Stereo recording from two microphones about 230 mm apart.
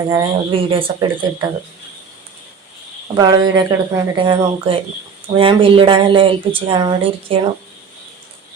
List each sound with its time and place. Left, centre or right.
0.1 s speech: right
3.2 s speech: centre